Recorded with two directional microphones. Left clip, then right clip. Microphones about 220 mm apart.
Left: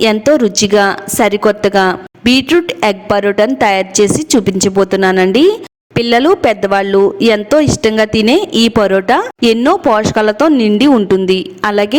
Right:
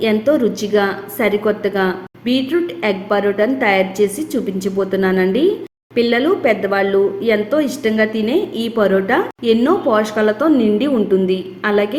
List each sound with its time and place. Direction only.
0.0 s speech: 45° left (ahead or behind)